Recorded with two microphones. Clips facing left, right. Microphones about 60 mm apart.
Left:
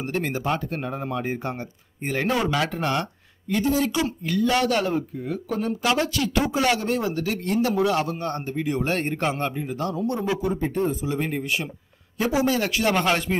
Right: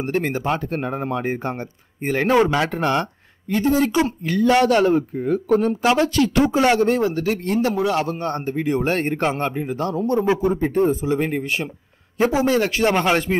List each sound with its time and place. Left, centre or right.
0.2 s a man's voice: right
7.7 s a man's voice: right
8.1 s speech: right
12.9 s speech: centre